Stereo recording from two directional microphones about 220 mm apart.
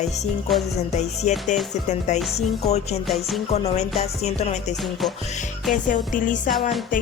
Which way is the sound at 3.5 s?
25° left (ahead or behind).